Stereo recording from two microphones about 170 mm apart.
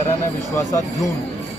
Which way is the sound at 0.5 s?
15° left (ahead or behind).